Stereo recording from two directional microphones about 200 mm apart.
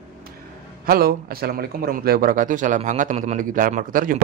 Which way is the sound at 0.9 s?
50° right (ahead or behind).